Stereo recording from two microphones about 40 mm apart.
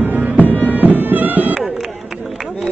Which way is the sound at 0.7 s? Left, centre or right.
Right.